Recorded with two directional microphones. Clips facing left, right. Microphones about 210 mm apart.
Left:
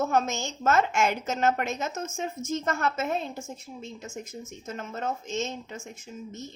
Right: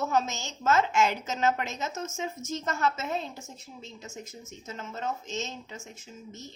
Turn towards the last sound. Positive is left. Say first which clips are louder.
# left 5 dB
turn(degrees=50)  # may be behind; listen again after turning